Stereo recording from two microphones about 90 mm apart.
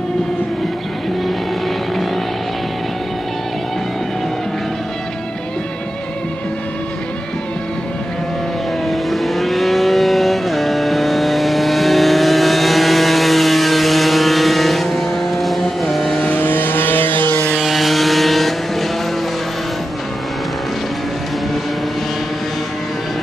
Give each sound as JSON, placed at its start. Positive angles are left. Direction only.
{"t": 8.8, "sound": "vehicle", "side_deg": 0}
{"t": 16.2, "sound": "vehicle", "side_deg": 20}
{"t": 17.6, "sound": "vehicle", "side_deg": 0}